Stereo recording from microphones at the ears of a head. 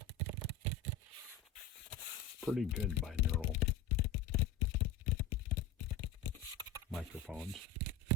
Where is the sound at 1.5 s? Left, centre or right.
Left.